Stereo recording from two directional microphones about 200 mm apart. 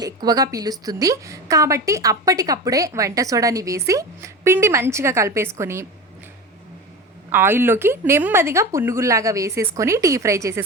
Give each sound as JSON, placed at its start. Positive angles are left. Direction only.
{"t": 0.0, "sound": "a woman's voice", "side_deg": -20}
{"t": 7.3, "sound": "a woman's voice", "side_deg": -10}